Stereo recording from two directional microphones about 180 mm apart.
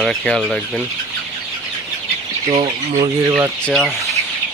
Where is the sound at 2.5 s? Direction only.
35° right (ahead or behind).